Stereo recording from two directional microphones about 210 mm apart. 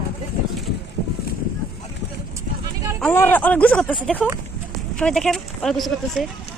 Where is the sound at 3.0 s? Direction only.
10° left (ahead or behind).